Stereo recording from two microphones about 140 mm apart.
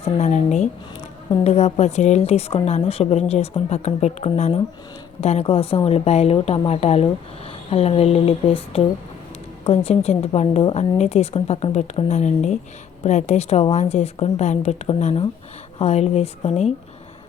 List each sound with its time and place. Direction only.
0.0 s a woman's voice: 55° left (ahead or behind)